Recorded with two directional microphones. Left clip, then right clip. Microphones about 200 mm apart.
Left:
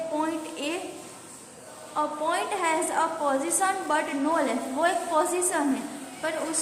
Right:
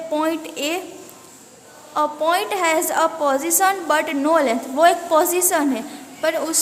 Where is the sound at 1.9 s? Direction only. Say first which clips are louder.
Right 8 dB; 55° right (ahead or behind).